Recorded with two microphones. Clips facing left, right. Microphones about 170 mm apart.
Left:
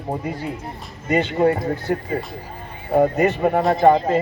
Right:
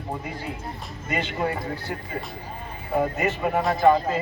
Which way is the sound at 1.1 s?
45° left (ahead or behind).